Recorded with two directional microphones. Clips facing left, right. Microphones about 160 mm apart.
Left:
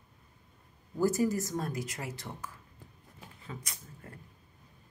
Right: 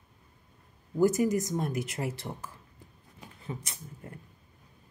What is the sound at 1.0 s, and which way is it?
Speech, 20° right (ahead or behind).